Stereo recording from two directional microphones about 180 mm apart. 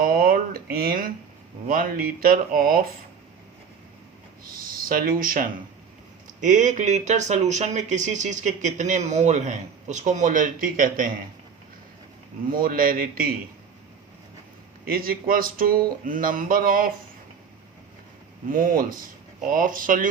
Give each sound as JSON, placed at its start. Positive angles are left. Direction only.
{"t": 0.0, "sound": "a sound", "side_deg": -50}
{"t": 1.6, "sound": "speech", "side_deg": -50}
{"t": 4.5, "sound": "speech", "side_deg": -50}
{"t": 12.5, "sound": "speech", "side_deg": -50}
{"t": 14.8, "sound": "speech", "side_deg": -55}
{"t": 18.4, "sound": "speech", "side_deg": -50}